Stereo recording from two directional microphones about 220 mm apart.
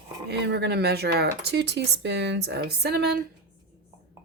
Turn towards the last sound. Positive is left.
turn(degrees=-45)  # may be behind; listen again after turning